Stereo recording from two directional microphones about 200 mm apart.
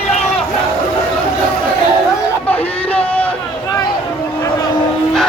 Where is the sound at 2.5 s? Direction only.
10° left (ahead or behind).